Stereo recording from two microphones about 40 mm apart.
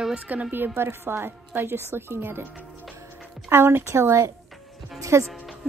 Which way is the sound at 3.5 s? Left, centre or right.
Right.